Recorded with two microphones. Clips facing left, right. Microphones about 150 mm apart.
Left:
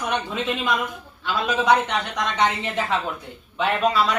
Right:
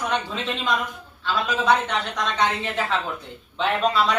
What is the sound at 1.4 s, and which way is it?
A woman's voice, 15° left (ahead or behind).